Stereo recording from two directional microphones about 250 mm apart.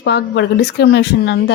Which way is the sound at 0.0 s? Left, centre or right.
Left.